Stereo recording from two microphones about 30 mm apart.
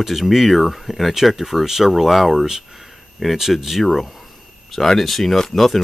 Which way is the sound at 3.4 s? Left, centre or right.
Centre.